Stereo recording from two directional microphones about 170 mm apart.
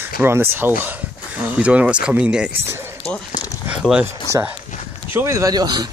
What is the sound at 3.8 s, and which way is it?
Speech, 5° right (ahead or behind).